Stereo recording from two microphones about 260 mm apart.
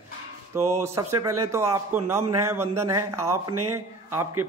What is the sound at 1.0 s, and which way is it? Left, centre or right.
Speech, right.